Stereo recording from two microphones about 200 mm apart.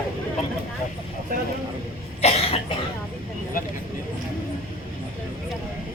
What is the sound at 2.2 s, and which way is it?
Cough, 30° left (ahead or behind).